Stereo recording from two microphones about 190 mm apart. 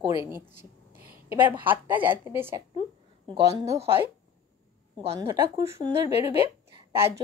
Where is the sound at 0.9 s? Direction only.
50° right (ahead or behind).